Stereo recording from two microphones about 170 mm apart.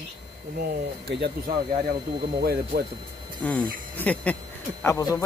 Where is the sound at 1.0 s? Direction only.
75° right (ahead or behind).